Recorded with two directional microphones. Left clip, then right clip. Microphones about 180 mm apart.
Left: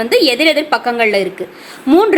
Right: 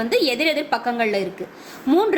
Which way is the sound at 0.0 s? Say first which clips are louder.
Left 8 dB; 35° left (ahead or behind).